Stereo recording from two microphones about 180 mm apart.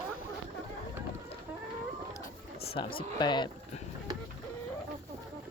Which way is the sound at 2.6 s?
30° left (ahead or behind).